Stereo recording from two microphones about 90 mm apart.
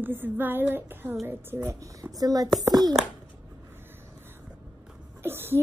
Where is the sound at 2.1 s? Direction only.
45° right (ahead or behind).